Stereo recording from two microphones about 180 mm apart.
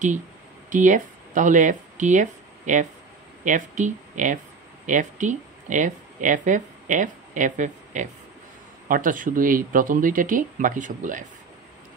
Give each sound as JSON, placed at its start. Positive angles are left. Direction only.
{"t": 0.7, "sound": "speech", "side_deg": -45}